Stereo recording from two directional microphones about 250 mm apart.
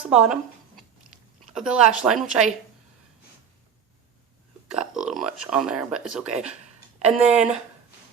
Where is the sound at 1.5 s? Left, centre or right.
Centre.